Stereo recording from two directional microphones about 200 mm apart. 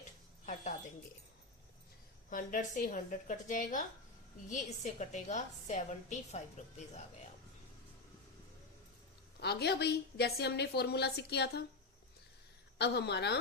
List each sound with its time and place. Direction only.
2.3 s a woman's voice: 40° left (ahead or behind)
9.4 s a woman's voice: 55° left (ahead or behind)
12.8 s a woman's voice: 55° left (ahead or behind)